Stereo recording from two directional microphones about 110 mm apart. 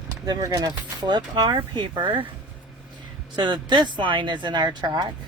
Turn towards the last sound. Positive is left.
turn(degrees=-40)  # may be behind; listen again after turning